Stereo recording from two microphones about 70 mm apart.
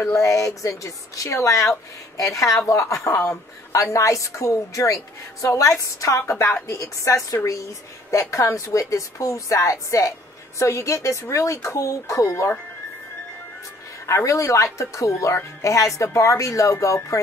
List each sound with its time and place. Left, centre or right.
0.0 s speech: left
14.0 s speech: left